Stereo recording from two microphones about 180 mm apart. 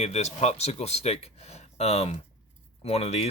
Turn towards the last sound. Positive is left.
turn(degrees=35)  # may be behind; listen again after turning